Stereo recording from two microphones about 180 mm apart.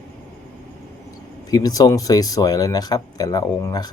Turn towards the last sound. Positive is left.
turn(degrees=20)  # may be behind; listen again after turning